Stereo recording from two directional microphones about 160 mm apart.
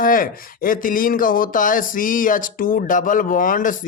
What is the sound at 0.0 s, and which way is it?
Speech, 60° left (ahead or behind).